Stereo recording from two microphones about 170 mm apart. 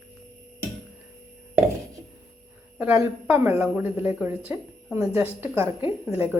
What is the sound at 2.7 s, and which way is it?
A woman's voice, 10° right (ahead or behind).